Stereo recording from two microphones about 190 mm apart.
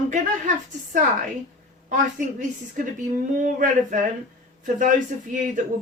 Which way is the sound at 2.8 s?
45° right (ahead or behind).